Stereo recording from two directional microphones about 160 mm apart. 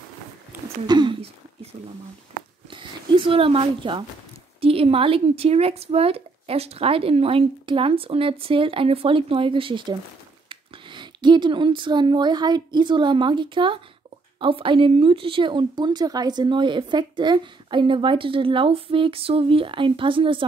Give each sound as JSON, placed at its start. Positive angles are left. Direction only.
{"t": 0.8, "sound": "speech", "side_deg": -30}
{"t": 2.7, "sound": "a woman's voice", "side_deg": -30}